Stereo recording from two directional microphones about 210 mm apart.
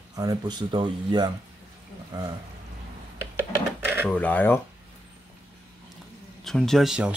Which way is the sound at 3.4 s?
10° right (ahead or behind).